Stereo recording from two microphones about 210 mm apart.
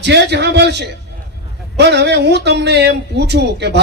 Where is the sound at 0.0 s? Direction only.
55° right (ahead or behind).